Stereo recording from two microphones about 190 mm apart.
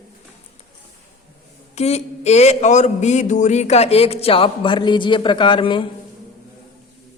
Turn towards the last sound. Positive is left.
turn(degrees=25)  # may be behind; listen again after turning